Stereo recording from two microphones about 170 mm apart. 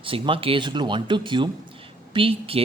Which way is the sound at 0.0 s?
30° right (ahead or behind).